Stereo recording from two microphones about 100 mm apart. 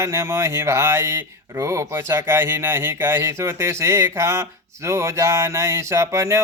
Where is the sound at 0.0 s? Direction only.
30° right (ahead or behind).